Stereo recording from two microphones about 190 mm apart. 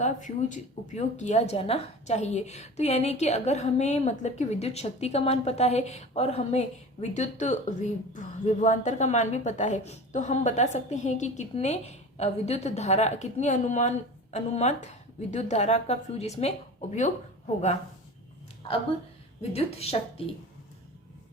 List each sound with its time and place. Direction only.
0.0 s speech: 40° left (ahead or behind)
19.4 s speech: 30° left (ahead or behind)